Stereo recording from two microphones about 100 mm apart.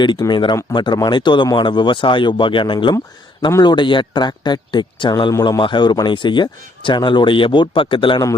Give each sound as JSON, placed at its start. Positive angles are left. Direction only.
{"t": 0.3, "sound": "a man's voice", "side_deg": 50}